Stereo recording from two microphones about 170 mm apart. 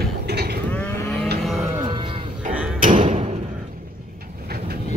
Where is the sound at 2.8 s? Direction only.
50° right (ahead or behind).